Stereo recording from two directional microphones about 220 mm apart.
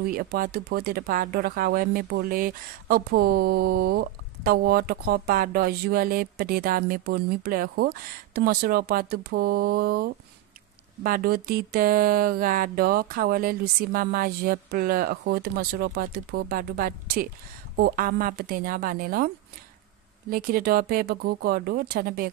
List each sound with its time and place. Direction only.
0.0 s speech: 40° right (ahead or behind)
11.0 s a sound: 40° right (ahead or behind)
20.2 s speech: 40° right (ahead or behind)